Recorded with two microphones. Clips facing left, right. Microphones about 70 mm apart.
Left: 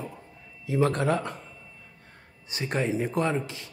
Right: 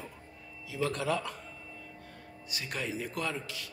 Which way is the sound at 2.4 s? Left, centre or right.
Left.